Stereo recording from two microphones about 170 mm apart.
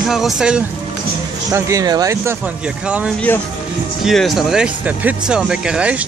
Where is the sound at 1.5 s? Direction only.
20° right (ahead or behind).